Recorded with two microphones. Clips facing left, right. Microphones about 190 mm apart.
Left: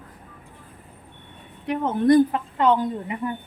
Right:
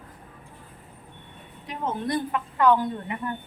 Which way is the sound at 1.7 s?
50° left (ahead or behind).